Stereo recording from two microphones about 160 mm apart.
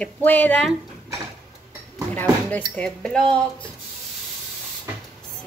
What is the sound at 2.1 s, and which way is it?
Speech, 10° left (ahead or behind).